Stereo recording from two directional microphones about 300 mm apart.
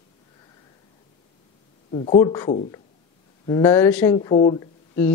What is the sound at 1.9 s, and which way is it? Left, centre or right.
Speech, centre.